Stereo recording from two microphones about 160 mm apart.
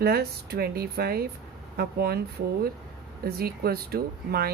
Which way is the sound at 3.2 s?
75° right (ahead or behind).